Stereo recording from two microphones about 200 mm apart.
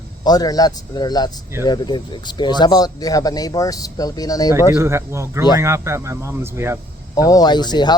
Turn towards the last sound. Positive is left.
turn(degrees=20)  # may be behind; listen again after turning